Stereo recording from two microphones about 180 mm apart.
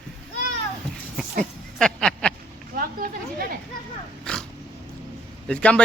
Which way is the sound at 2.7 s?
55° right (ahead or behind).